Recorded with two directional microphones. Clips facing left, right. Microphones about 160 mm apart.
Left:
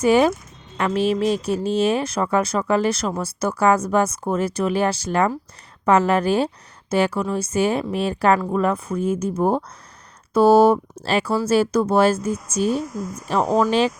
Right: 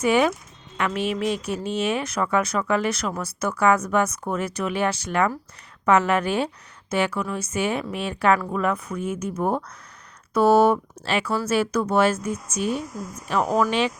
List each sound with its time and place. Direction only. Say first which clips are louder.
0.0 s a woman's voice: left 4 dB; 35° left (ahead or behind)